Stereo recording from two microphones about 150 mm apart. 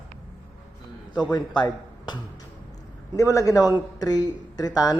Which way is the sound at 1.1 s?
30° left (ahead or behind).